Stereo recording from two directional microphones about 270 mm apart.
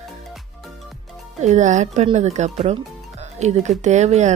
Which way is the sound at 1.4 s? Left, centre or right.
Right.